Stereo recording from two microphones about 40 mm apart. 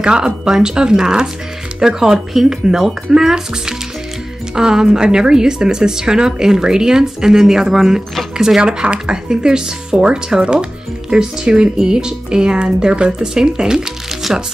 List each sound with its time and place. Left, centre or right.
0.0 s a woman's voice: right